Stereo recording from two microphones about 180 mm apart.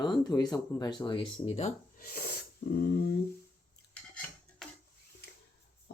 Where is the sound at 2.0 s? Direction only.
55° left (ahead or behind).